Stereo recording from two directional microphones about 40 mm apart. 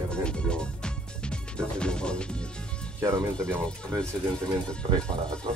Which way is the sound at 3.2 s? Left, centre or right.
Left.